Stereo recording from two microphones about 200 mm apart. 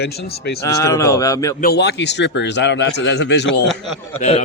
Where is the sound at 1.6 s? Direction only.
55° left (ahead or behind).